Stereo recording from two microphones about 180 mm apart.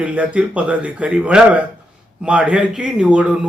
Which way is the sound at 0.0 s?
5° right (ahead or behind).